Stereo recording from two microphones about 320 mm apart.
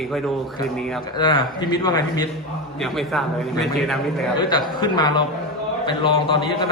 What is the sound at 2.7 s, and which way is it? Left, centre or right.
A man's voice, centre.